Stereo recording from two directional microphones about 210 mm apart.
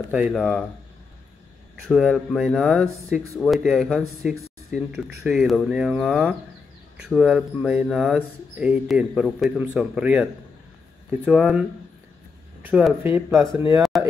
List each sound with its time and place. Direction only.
0.1 s speech: 5° right (ahead or behind)
1.9 s speech: centre (ahead or behind)
12.6 s speech: 5° right (ahead or behind)